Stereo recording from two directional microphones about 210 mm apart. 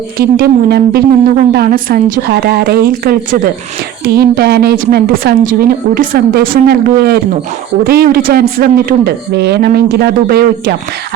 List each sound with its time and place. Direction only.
0.2 s a woman's voice: 45° right (ahead or behind)